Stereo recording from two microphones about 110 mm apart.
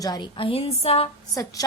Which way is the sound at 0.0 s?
35° left (ahead or behind).